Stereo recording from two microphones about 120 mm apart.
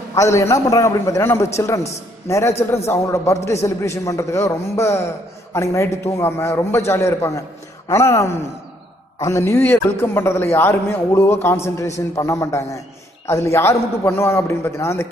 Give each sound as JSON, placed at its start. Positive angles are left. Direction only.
{"t": 0.1, "sound": "a man's voice", "side_deg": 25}